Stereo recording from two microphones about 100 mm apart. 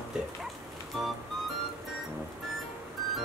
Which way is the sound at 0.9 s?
Centre (ahead or behind).